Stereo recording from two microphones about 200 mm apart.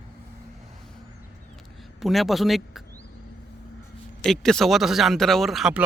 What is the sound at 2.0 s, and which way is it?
Speech, centre (ahead or behind).